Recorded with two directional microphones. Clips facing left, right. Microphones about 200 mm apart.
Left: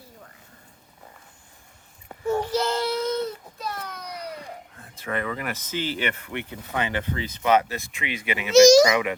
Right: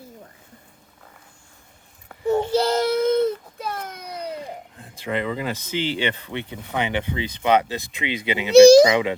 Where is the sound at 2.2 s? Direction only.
20° right (ahead or behind); by 3.9 s 50° right (ahead or behind).